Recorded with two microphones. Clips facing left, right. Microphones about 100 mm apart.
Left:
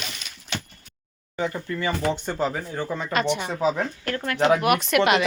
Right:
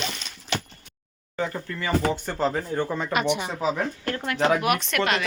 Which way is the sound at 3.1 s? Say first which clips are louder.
Even; 15° right (ahead or behind).